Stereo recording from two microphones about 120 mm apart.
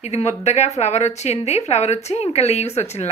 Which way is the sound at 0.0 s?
65° left (ahead or behind).